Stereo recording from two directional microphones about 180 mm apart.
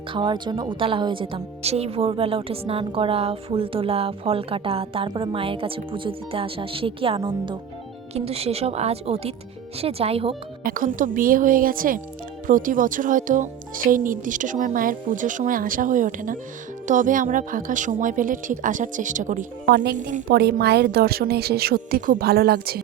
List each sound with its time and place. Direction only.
0.1 s a woman's voice: 25° right (ahead or behind)
10.6 s speech: 50° right (ahead or behind)
20.2 s a woman's voice: 60° right (ahead or behind)